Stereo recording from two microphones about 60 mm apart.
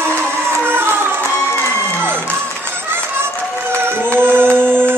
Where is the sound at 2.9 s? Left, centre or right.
Right.